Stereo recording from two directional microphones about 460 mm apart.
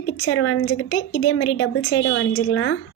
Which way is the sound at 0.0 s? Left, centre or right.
Left.